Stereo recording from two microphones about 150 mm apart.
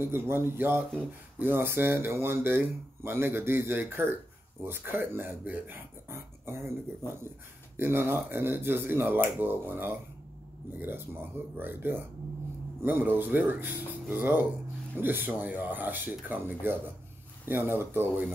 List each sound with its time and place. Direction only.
0.0 s speech: 15° right (ahead or behind)
7.7 s speech: 15° right (ahead or behind)